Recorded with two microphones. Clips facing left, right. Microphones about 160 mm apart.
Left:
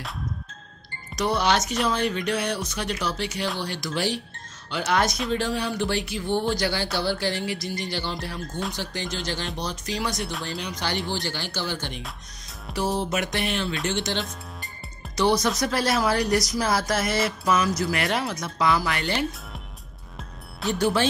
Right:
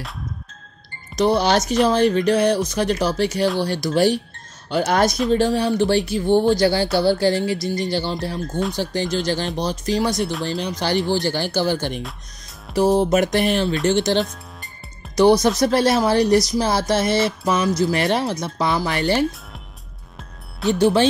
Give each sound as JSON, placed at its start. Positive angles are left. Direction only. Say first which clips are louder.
{"t": 1.1, "sound": "speech", "louder": "right 6 dB", "side_deg": -30}
{"t": 15.6, "sound": "speech", "louder": "right 7 dB", "side_deg": -30}
{"t": 20.8, "sound": "speech", "louder": "right 7 dB", "side_deg": -25}